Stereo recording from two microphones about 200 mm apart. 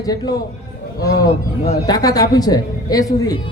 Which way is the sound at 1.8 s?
20° left (ahead or behind).